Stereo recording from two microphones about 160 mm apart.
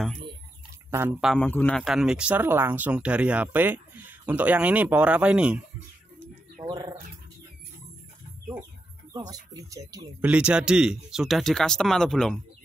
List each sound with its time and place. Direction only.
0.8 s speech: 15° right (ahead or behind)
1.2 s speech: centre (ahead or behind)
1.5 s a man's voice: 10° left (ahead or behind)
1.9 s speech: 5° right (ahead or behind)
6.6 s speech: 25° right (ahead or behind)
9.1 s speech: 25° right (ahead or behind)
10.2 s speech: 5° right (ahead or behind)